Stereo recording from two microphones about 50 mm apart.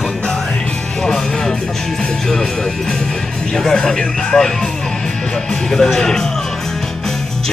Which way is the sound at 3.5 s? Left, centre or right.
Centre.